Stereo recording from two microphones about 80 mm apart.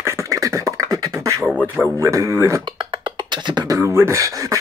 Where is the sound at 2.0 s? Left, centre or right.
Right.